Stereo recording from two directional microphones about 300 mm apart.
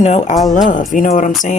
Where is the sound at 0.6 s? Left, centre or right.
Left.